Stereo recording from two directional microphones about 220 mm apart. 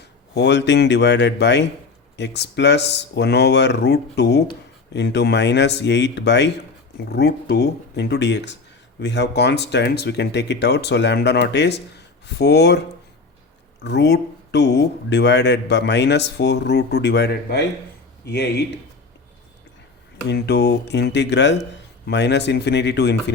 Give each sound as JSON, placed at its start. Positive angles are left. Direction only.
{"t": 0.0, "sound": "a man's voice", "side_deg": 50}
{"t": 13.8, "sound": "speech", "side_deg": 50}
{"t": 20.2, "sound": "speech", "side_deg": 50}